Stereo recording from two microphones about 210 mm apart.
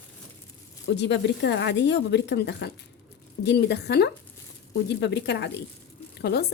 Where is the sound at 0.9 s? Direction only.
55° left (ahead or behind).